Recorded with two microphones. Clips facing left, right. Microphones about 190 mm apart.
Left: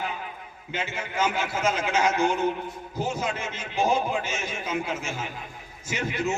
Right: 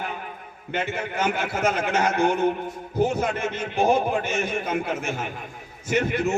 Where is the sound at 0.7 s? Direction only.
55° right (ahead or behind).